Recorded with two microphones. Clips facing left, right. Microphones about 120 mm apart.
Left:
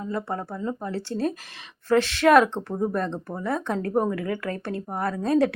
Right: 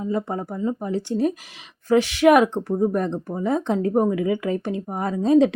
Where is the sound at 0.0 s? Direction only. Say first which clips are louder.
Right 4 dB; 15° right (ahead or behind).